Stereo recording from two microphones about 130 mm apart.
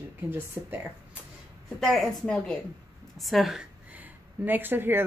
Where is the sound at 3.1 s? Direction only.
Centre (ahead or behind); by 5.0 s 15° right (ahead or behind).